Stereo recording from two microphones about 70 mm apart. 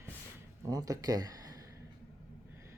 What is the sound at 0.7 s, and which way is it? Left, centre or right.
Speech, right.